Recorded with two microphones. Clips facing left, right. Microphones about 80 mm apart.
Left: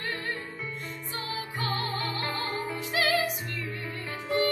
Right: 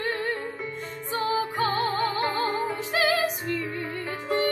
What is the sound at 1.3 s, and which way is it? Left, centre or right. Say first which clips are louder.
Music: right 6 dB; right.